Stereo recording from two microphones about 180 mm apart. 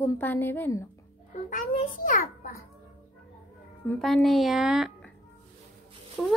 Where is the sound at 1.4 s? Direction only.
45° left (ahead or behind).